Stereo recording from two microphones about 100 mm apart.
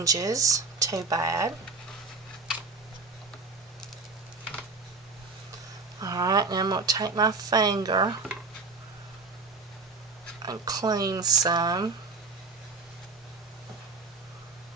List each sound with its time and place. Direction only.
0.0 s speech: 35° right (ahead or behind)
6.0 s speech: 40° right (ahead or behind)
10.4 s speech: 40° right (ahead or behind)